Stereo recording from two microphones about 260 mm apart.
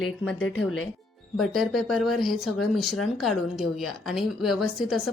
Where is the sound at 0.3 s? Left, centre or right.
Left.